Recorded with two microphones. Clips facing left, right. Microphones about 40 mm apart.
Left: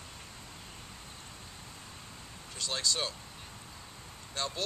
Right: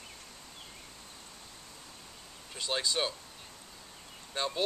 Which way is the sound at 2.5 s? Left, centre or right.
Centre.